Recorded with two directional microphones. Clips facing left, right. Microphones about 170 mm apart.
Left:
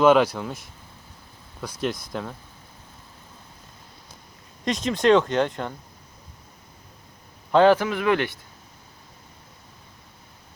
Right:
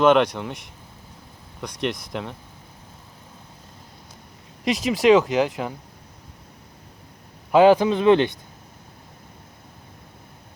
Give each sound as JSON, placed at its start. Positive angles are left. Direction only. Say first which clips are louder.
{"t": 0.0, "sound": "speech", "louder": "even", "side_deg": 5}
{"t": 4.6, "sound": "speech", "louder": "right 2 dB", "side_deg": -5}
{"t": 7.5, "sound": "speech", "louder": "right 3 dB", "side_deg": -15}